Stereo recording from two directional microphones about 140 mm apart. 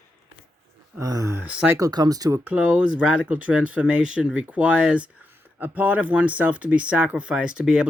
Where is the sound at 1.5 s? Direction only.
10° right (ahead or behind).